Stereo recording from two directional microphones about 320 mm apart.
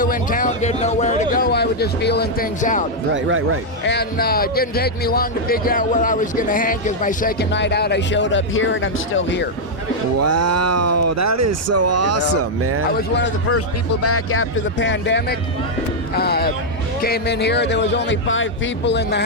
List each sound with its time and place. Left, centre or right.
0.0 s a man's voice: left
3.2 s speech: right
3.8 s speech: left
10.2 s speech: right
12.9 s speech: left